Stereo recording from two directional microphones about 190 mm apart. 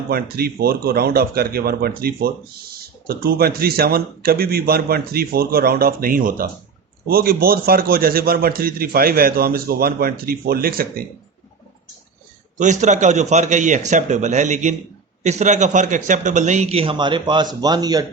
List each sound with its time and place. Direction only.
0.1 s a man's voice: 55° right (ahead or behind)
12.5 s a man's voice: 40° right (ahead or behind); by 18.0 s 20° right (ahead or behind)